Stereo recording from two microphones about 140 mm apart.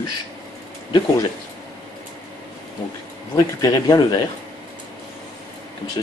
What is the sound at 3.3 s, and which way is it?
Speech, 25° left (ahead or behind).